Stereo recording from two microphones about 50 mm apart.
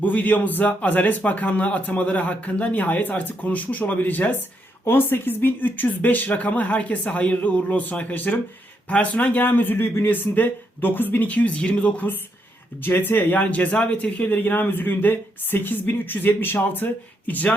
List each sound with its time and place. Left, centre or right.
0.0 s a man's voice: left
10.3 s a man's voice: left
12.8 s speech: left
13.4 s a man's voice: left
14.3 s speech: left